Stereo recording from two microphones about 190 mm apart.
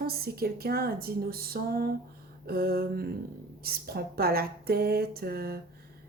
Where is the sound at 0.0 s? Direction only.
55° right (ahead or behind).